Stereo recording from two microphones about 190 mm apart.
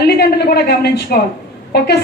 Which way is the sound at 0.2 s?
55° left (ahead or behind).